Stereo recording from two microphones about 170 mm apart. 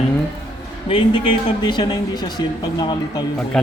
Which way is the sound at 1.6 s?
25° left (ahead or behind).